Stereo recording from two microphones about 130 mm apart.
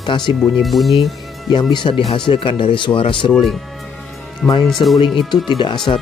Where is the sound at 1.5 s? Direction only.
35° left (ahead or behind).